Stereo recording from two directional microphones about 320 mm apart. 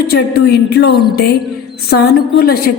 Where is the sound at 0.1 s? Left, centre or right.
Left.